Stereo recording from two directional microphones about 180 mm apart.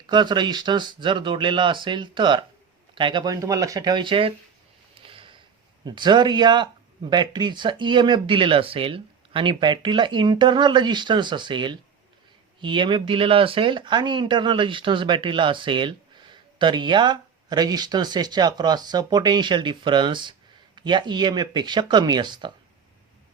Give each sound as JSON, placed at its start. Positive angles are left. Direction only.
{"t": 0.1, "sound": "speech", "side_deg": -25}
{"t": 5.0, "sound": "a sound", "side_deg": -30}
{"t": 5.8, "sound": "speech", "side_deg": -25}